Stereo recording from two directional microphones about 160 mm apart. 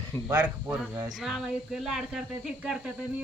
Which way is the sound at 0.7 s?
20° right (ahead or behind).